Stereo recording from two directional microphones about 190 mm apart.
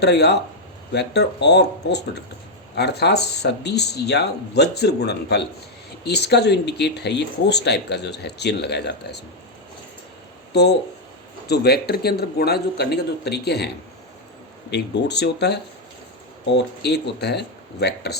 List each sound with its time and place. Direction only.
0.0 s speech: 60° left (ahead or behind)
10.5 s speech: 60° left (ahead or behind)
14.7 s speech: 65° left (ahead or behind)
16.6 s speech: 60° left (ahead or behind)